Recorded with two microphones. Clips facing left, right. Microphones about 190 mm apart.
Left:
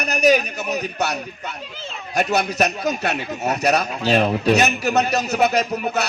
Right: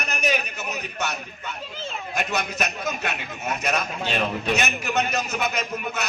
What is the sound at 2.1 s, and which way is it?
A man's voice, 35° left (ahead or behind).